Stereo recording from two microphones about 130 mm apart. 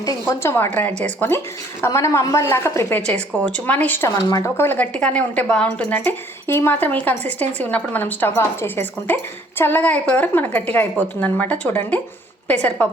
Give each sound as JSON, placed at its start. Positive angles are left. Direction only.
{"t": 0.0, "sound": "a woman's voice", "side_deg": 25}
{"t": 4.1, "sound": "speech", "side_deg": 30}